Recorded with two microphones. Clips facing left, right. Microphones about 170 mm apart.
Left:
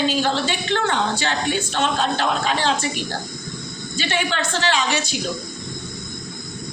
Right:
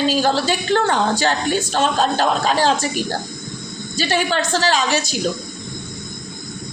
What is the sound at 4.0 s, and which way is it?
A woman's voice, 40° right (ahead or behind).